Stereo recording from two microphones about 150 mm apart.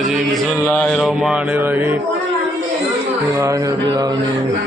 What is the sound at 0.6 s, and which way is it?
Mantra, 10° left (ahead or behind).